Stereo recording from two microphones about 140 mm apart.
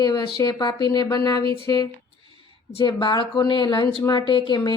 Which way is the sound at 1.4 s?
40° right (ahead or behind).